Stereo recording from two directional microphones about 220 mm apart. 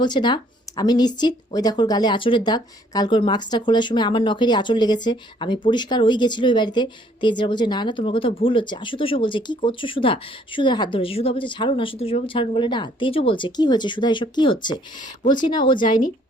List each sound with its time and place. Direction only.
0.0 s speech: 20° left (ahead or behind)